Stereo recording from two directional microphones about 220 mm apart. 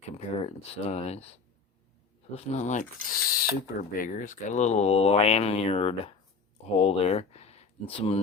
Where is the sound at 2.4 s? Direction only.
30° left (ahead or behind).